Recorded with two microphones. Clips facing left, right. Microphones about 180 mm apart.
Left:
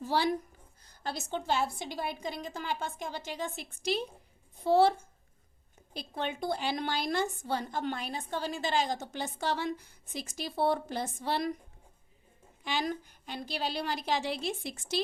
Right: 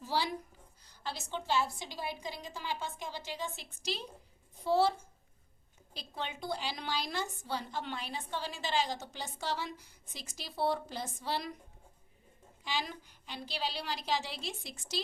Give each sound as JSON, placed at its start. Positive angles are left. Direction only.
{"t": 0.0, "sound": "a woman's voice", "side_deg": 55}
{"t": 12.6, "sound": "a woman's voice", "side_deg": 50}